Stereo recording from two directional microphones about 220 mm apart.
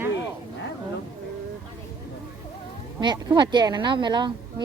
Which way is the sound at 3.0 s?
20° right (ahead or behind).